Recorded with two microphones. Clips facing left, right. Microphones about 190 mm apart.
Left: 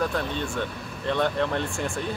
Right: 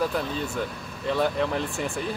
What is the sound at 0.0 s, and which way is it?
Speech, 5° right (ahead or behind).